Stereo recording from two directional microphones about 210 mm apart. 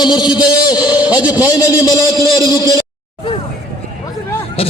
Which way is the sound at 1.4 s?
20° left (ahead or behind).